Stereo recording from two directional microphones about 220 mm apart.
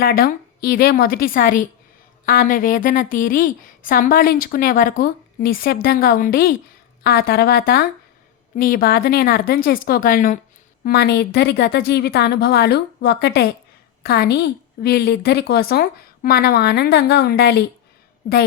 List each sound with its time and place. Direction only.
0.0 s a woman's voice: 40° left (ahead or behind)